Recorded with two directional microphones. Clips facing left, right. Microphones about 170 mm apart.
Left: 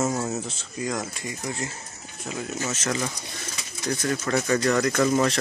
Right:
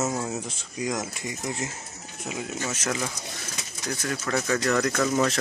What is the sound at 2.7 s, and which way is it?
Speech, 5° right (ahead or behind).